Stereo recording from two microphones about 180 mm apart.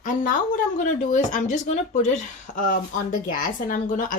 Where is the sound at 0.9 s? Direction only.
45° left (ahead or behind).